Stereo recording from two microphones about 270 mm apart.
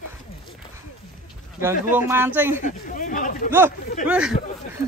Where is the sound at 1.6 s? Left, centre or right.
Centre.